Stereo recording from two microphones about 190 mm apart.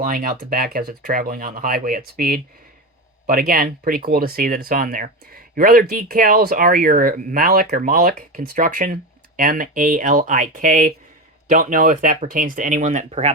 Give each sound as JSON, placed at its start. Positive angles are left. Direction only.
{"t": 0.0, "sound": "speech", "side_deg": -45}